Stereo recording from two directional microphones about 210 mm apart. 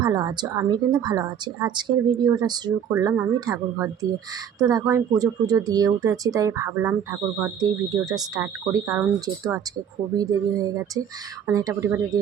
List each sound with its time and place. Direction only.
0.0 s a woman's voice: 20° right (ahead or behind)